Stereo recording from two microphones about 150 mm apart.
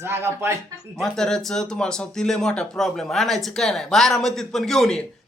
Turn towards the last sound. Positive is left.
turn(degrees=0)  # may be behind; listen again after turning